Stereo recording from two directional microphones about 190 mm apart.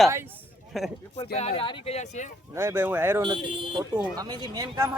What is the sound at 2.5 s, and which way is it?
Speech, 10° right (ahead or behind).